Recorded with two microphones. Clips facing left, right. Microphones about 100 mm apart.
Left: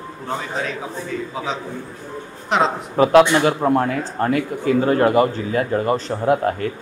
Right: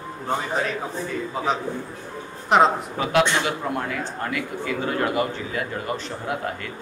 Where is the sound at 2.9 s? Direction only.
40° left (ahead or behind).